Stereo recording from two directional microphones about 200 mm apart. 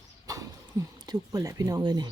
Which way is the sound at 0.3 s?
15° right (ahead or behind).